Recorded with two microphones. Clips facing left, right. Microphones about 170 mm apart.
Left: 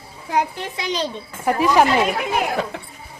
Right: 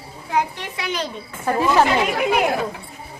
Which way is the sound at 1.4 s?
15° left (ahead or behind).